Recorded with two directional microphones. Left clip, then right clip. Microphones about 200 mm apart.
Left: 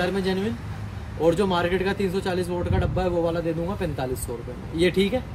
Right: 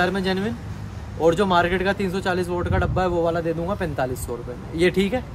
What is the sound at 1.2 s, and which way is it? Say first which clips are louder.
A man's voice: right 3 dB; 15° right (ahead or behind).